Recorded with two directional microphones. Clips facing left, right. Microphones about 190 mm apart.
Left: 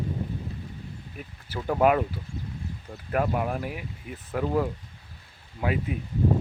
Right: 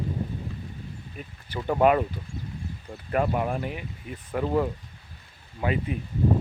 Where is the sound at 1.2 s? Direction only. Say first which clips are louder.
Right 1 dB; 5° left (ahead or behind).